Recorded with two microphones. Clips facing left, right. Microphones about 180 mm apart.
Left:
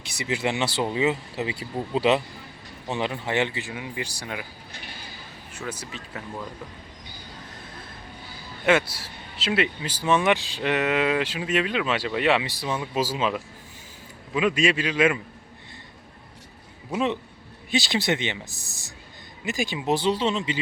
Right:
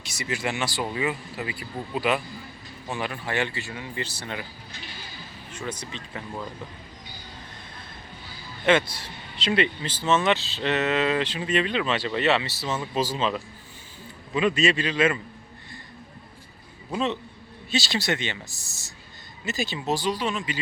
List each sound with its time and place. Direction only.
0.3 s speech: 20° left (ahead or behind)
5.5 s speech: 10° left (ahead or behind)
8.6 s speech: 5° left (ahead or behind)
16.9 s speech: 15° left (ahead or behind)
19.5 s speech: 15° left (ahead or behind)